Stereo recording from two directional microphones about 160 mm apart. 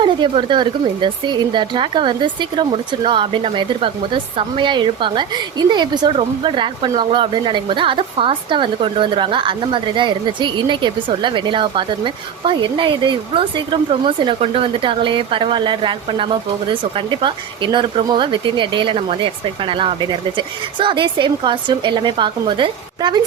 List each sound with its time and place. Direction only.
0.0 s speech: 30° right (ahead or behind)